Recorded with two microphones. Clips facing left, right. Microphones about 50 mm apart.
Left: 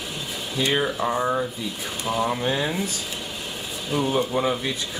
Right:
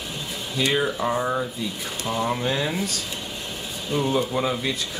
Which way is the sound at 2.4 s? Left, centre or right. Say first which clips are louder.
Left 1 dB; centre.